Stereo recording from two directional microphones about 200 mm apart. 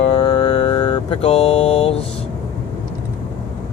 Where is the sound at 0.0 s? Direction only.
25° left (ahead or behind).